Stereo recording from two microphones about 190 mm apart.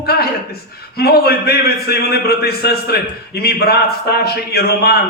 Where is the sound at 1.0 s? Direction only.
55° left (ahead or behind).